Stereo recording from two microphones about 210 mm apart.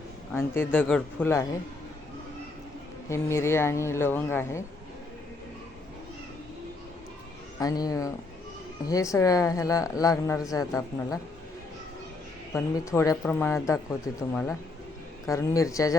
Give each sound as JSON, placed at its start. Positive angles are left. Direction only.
{"t": 0.3, "sound": "speech", "side_deg": 10}
{"t": 3.1, "sound": "speech", "side_deg": 15}
{"t": 7.6, "sound": "speech", "side_deg": 15}
{"t": 12.5, "sound": "speech", "side_deg": 15}